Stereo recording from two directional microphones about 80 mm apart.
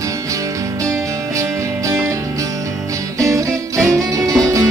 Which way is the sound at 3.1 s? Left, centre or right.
Right.